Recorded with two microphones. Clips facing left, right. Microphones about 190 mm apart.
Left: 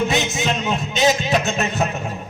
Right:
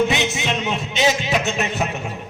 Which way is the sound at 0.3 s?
40° left (ahead or behind).